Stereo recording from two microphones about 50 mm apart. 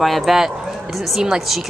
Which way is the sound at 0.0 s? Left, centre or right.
Centre.